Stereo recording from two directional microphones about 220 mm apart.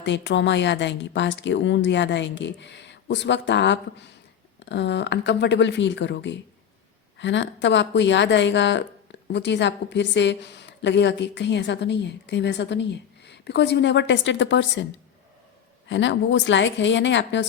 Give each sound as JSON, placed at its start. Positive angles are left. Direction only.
{"t": 0.0, "sound": "a woman's voice", "side_deg": 55}
{"t": 15.9, "sound": "a woman's voice", "side_deg": 55}